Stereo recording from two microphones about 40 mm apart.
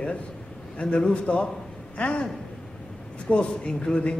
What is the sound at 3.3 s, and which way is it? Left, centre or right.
Speech, left.